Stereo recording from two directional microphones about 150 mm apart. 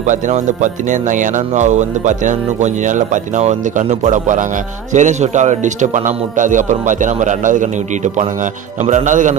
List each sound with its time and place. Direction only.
0.0 s a man's voice: 55° right (ahead or behind)